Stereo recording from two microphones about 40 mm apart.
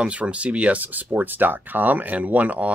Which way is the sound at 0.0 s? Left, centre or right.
Right.